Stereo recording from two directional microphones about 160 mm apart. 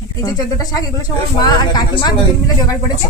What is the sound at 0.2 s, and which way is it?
Speech, 25° left (ahead or behind).